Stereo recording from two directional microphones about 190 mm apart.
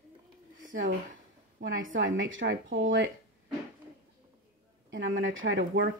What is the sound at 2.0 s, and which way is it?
Speech, 90° right.